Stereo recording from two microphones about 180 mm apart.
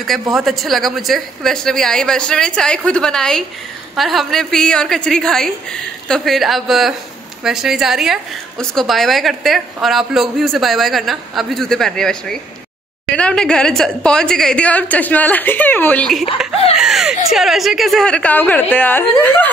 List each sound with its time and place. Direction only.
0.0 s a woman's voice: centre (ahead or behind)
16.7 s a sound: 5° right (ahead or behind)
17.3 s a woman's voice: centre (ahead or behind)